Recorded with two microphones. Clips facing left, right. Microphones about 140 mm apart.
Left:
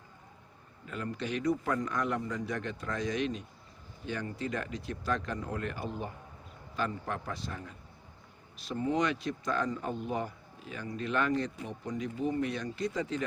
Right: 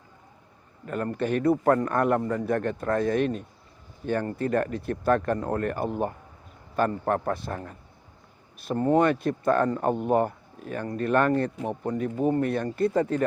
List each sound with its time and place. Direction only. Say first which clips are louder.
0.9 s a man's voice: right 9 dB; 55° right (ahead or behind)